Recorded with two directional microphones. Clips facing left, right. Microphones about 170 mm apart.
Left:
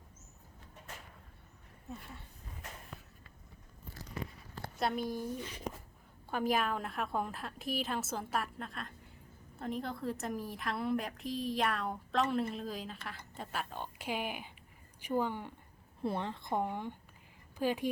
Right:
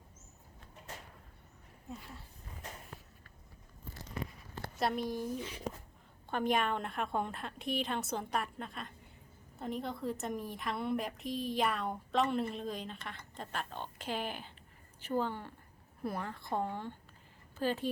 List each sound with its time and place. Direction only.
4.8 s a woman's voice: centre (ahead or behind)
16.0 s a woman's voice: 25° left (ahead or behind)